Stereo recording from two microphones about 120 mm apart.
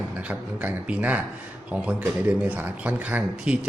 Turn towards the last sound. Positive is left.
turn(degrees=-10)  # may be behind; listen again after turning